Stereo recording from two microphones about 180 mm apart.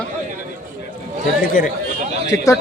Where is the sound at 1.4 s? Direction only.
50° left (ahead or behind).